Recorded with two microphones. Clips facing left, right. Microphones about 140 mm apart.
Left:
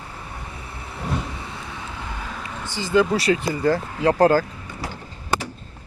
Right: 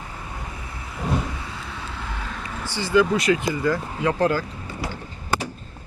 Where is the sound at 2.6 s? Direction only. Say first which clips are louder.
Even; 15° left (ahead or behind); by 4.4 s 40° left (ahead or behind).